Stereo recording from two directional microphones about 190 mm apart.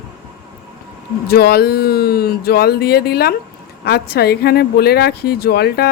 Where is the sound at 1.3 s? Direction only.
55° left (ahead or behind).